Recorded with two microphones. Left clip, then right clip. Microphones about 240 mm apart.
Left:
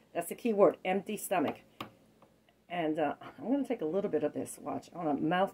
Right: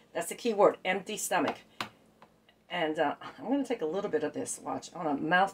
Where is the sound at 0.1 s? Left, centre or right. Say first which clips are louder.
Right 1 dB; centre.